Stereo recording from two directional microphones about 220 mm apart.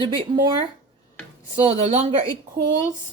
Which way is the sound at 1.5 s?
25° right (ahead or behind).